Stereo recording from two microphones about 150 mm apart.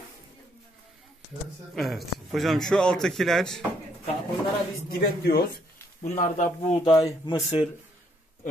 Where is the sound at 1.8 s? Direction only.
Centre (ahead or behind).